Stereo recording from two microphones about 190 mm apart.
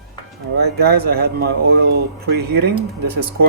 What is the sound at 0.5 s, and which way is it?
Speech, 55° right (ahead or behind).